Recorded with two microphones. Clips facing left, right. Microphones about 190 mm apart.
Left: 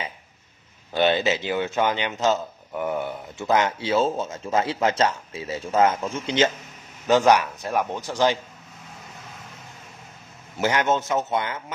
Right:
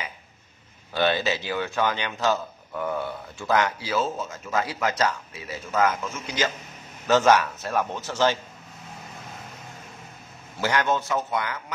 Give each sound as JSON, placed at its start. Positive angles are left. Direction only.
{"t": 0.9, "sound": "a man's voice", "side_deg": 20}
{"t": 10.6, "sound": "speech", "side_deg": 20}